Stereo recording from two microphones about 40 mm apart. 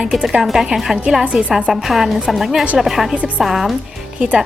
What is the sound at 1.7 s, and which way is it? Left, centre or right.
A woman's voice, centre.